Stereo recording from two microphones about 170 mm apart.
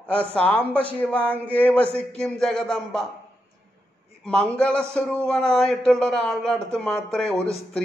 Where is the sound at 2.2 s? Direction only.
5° left (ahead or behind).